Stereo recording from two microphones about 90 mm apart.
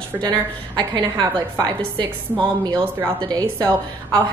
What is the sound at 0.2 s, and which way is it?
A woman's voice, 55° right (ahead or behind).